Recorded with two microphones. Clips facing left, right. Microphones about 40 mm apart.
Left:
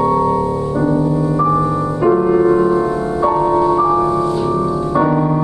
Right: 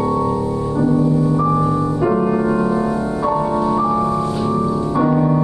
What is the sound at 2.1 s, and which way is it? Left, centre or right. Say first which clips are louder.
Music: left 7 dB; centre.